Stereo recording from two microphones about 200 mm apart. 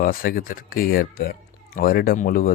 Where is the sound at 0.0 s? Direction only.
45° left (ahead or behind).